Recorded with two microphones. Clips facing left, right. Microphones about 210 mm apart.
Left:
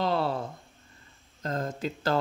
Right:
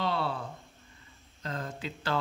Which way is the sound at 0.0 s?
40° left (ahead or behind).